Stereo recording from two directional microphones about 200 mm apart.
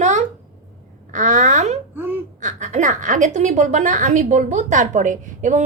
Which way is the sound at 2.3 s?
40° right (ahead or behind).